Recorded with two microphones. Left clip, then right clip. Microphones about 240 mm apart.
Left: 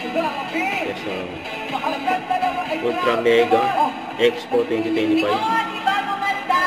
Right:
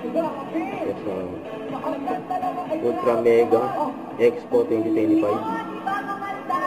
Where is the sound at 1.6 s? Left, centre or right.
Centre.